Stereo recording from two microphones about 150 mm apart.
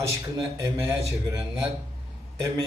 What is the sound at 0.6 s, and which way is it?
A man's voice, 20° right (ahead or behind).